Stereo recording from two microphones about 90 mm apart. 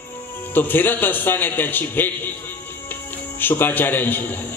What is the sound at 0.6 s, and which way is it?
Speech, 20° left (ahead or behind).